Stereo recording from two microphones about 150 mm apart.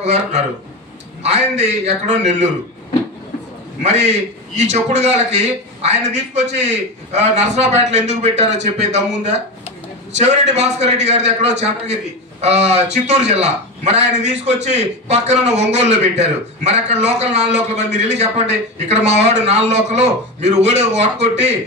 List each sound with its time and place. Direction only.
0.0 s a man's voice: 50° right (ahead or behind)
3.8 s a man's voice: 50° right (ahead or behind)